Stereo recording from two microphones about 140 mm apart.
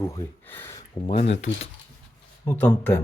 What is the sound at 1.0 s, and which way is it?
Speech, 45° left (ahead or behind).